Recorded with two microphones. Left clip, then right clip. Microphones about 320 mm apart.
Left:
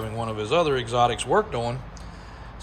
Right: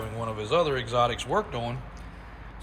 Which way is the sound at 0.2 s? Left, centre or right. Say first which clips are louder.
Left 2 dB; centre.